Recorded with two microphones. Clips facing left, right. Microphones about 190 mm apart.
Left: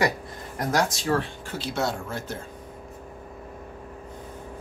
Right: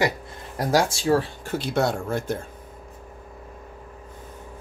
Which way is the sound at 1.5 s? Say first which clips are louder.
Right 5 dB; 55° right (ahead or behind).